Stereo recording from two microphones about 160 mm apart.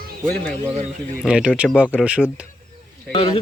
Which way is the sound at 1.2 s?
5° right (ahead or behind).